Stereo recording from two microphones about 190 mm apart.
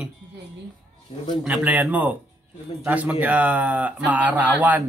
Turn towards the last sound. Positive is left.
turn(degrees=-10)  # may be behind; listen again after turning